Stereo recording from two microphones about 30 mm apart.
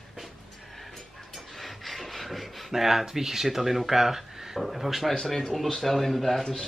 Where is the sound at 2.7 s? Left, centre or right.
Centre.